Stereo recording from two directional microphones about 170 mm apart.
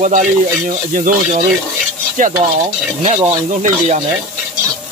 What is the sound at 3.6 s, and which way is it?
Speech, 40° right (ahead or behind).